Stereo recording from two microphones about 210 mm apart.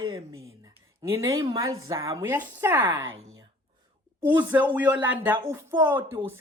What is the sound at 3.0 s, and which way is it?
Speech, 70° right (ahead or behind).